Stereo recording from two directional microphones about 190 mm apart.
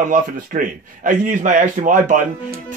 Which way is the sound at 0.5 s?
45° right (ahead or behind).